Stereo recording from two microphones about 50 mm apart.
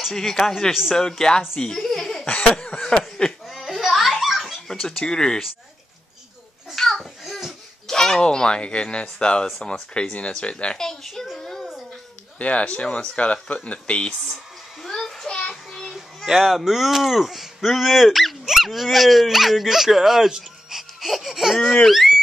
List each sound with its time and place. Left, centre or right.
0.1 s speech: centre
1.9 s laughter: centre
2.9 s a sound: centre
3.4 s belly laugh: centre
4.6 s speech: centre
6.7 s a sound: centre
7.8 s speech: centre
11.3 s a sound: centre
12.4 s speech: left
14.9 s children playing: centre
16.3 s speech: centre